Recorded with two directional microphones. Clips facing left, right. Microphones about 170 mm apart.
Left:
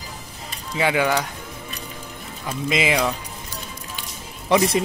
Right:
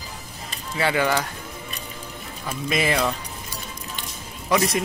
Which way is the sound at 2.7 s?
15° left (ahead or behind).